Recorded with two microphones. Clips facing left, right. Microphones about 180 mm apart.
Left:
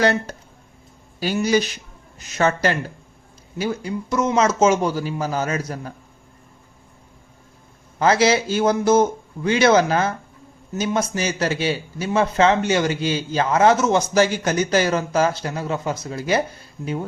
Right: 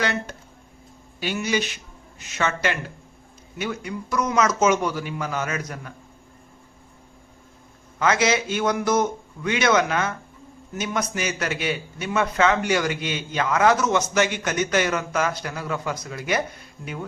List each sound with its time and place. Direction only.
0.0 s a man's voice: 35° left (ahead or behind)
7.9 s a man's voice: 30° left (ahead or behind)